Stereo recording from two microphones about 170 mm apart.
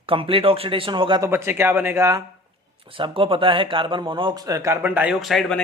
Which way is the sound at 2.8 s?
30° right (ahead or behind).